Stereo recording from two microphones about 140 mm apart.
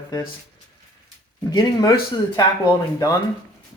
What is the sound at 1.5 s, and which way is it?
Speech, 25° left (ahead or behind).